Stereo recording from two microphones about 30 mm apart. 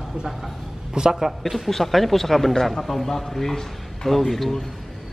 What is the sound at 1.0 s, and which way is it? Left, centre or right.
Speech, right.